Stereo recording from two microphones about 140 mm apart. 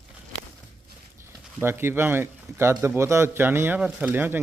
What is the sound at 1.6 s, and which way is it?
A man's voice, 15° right (ahead or behind).